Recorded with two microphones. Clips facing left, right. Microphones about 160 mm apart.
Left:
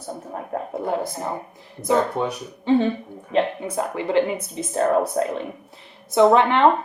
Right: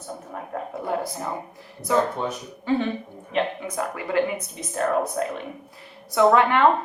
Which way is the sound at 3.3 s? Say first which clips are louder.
Left 4 dB; 35° left (ahead or behind).